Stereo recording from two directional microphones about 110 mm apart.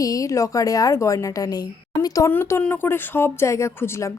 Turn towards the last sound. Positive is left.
turn(degrees=25)  # may be behind; listen again after turning